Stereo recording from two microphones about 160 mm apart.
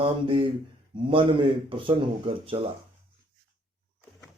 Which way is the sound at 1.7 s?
35° right (ahead or behind).